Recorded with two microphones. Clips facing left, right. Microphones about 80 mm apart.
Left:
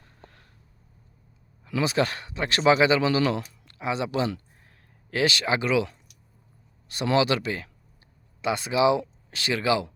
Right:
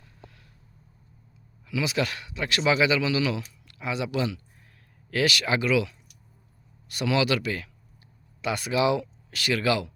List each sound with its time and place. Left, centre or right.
0.2 s vehicle: left
1.6 s speech: left